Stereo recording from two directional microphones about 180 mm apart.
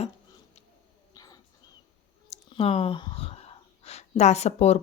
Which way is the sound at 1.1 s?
20° left (ahead or behind).